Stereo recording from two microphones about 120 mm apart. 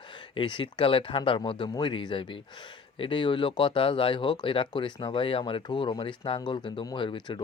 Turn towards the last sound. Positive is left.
turn(degrees=45)  # may be behind; listen again after turning